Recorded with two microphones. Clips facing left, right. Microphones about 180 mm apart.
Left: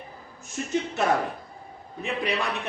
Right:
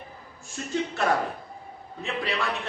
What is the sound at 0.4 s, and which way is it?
A man's voice, 20° left (ahead or behind).